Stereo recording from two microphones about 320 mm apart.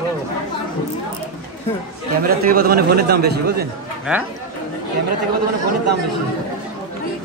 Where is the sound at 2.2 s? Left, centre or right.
Right.